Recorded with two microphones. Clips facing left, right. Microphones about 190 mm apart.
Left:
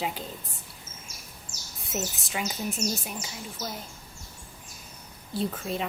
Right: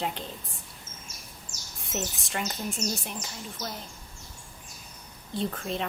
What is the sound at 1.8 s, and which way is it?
A woman's voice, 5° left (ahead or behind).